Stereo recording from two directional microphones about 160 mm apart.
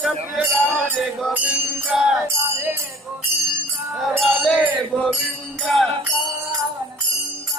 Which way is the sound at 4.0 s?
5° left (ahead or behind).